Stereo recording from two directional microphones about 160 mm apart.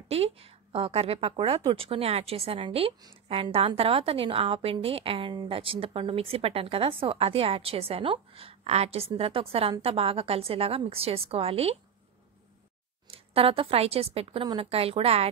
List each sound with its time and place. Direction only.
0.1 s a woman's voice: 40° right (ahead or behind)
13.1 s a woman's voice: 35° right (ahead or behind)